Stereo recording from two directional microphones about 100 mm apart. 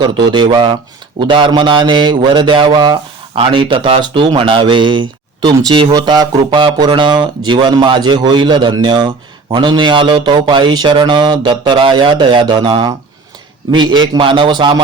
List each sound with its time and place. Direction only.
0.0 s speech: 50° right (ahead or behind)
3.3 s speech: 60° right (ahead or behind)
5.4 s speech: 40° right (ahead or behind)